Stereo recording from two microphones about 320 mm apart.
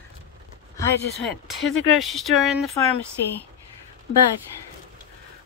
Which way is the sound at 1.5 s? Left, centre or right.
Centre.